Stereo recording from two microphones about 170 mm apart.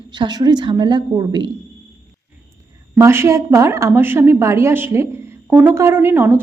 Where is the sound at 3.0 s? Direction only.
15° right (ahead or behind).